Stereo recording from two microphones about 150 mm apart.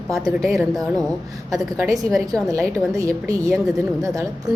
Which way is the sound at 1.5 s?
25° right (ahead or behind).